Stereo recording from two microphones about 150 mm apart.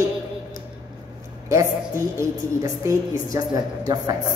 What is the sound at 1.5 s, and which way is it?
Speech, 20° right (ahead or behind).